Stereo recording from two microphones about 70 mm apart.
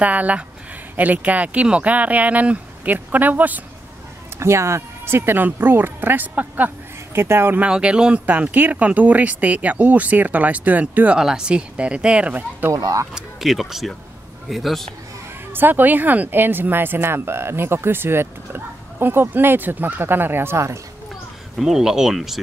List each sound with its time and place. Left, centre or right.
0.0 s speech: centre
4.4 s speech: right
7.6 s speech: centre
8.3 s speech: right
11.1 s speech: centre
12.7 s speech: right
13.1 s speech: centre
15.5 s speech: right
21.5 s speech: centre